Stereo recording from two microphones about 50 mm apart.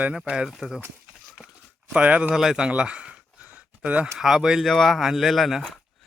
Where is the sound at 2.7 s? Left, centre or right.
Right.